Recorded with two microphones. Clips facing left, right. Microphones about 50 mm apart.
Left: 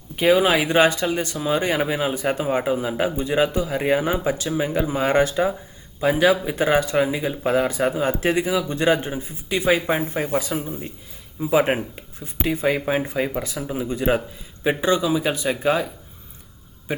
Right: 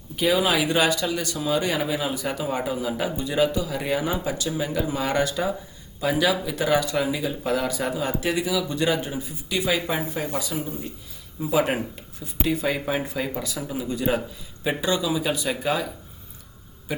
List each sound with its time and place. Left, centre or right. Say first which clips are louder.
0.2 s speech: left 4 dB; left